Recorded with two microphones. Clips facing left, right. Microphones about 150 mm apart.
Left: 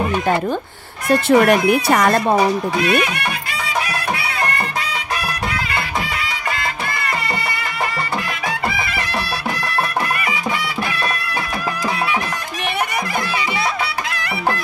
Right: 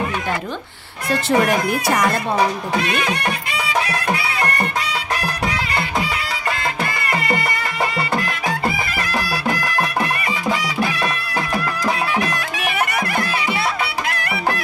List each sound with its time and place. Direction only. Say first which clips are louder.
1.0 s speech: left 5 dB; 60° left (ahead or behind)